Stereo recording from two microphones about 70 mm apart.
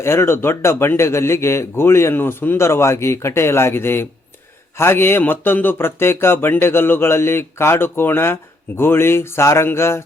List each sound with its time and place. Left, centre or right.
0.0 s a man's voice: left